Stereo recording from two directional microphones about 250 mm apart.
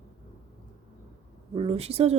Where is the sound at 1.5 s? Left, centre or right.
Right.